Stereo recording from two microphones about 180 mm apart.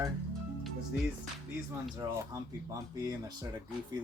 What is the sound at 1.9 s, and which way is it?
Speech, 15° right (ahead or behind).